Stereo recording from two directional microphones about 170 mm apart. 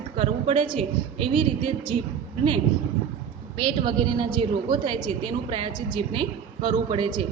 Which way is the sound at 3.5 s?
30° right (ahead or behind).